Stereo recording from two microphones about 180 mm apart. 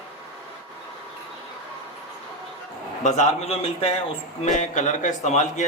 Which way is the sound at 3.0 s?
40° left (ahead or behind).